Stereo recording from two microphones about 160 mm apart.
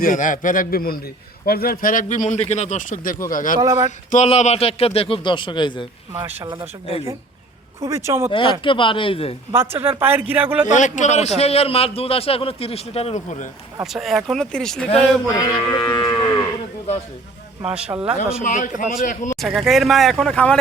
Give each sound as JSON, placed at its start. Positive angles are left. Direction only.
{"t": 0.0, "sound": "speech", "side_deg": 55}
{"t": 3.6, "sound": "speech", "side_deg": -20}
{"t": 3.8, "sound": "a man's voice", "side_deg": 45}
{"t": 6.1, "sound": "speech", "side_deg": -15}
{"t": 7.8, "sound": "speech", "side_deg": -20}
{"t": 8.6, "sound": "a man's voice", "side_deg": 30}
{"t": 9.5, "sound": "speech", "side_deg": -15}
{"t": 10.7, "sound": "a man's voice", "side_deg": 50}
{"t": 13.8, "sound": "speech", "side_deg": 0}
{"t": 15.4, "sound": "moo", "side_deg": 25}
{"t": 17.7, "sound": "speech", "side_deg": -5}
{"t": 18.4, "sound": "speech", "side_deg": 55}
{"t": 19.4, "sound": "speech", "side_deg": 0}